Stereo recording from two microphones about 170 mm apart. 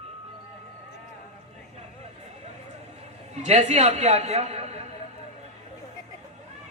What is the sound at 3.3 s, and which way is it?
A woman's voice, 40° right (ahead or behind).